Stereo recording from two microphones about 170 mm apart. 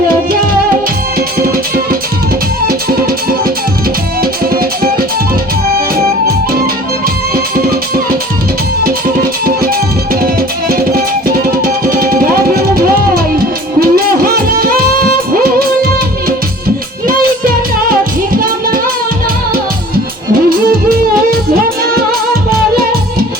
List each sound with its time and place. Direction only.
1.4 s music: 60° right (ahead or behind)
5.7 s music: 60° right (ahead or behind)
17.1 s music: 55° right (ahead or behind)